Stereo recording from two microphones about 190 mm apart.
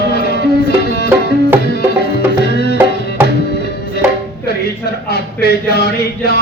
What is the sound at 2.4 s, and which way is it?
Music, 60° left (ahead or behind).